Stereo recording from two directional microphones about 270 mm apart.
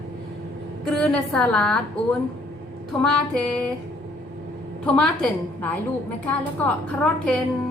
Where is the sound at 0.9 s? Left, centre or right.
Centre.